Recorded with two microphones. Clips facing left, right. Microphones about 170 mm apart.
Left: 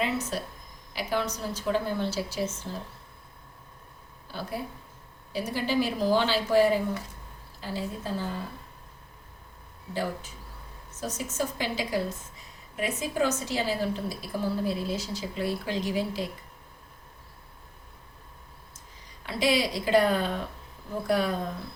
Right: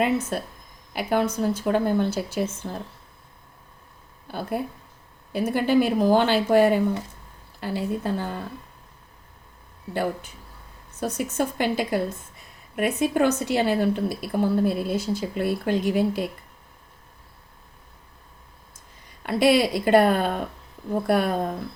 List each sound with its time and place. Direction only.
0.3 s a woman's voice: 55° right (ahead or behind)
4.3 s a woman's voice: 55° right (ahead or behind)
9.9 s a woman's voice: 60° right (ahead or behind)
19.2 s a woman's voice: 55° right (ahead or behind)